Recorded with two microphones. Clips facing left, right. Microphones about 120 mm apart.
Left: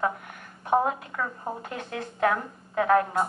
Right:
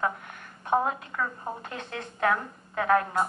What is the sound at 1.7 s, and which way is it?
A woman's voice, 25° left (ahead or behind).